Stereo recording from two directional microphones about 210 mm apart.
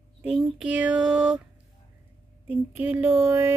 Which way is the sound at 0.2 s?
5° right (ahead or behind).